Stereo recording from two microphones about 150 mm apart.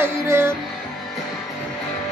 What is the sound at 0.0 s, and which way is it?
Music, 15° right (ahead or behind).